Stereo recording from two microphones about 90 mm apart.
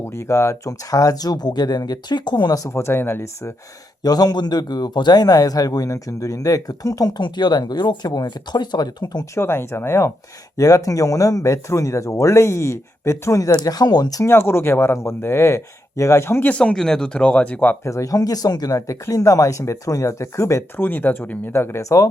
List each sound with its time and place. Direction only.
0.0 s a man's voice: 35° left (ahead or behind); by 2.6 s 55° left (ahead or behind)
2.6 s speech: 30° left (ahead or behind)
4.0 s a man's voice: 45° left (ahead or behind)
9.3 s speech: 30° left (ahead or behind)
10.6 s speech: 40° left (ahead or behind)
14.3 s speech: 30° left (ahead or behind)
16.5 s speech: 15° left (ahead or behind)
17.8 s speech: 35° left (ahead or behind)
20.8 s speech: 20° left (ahead or behind)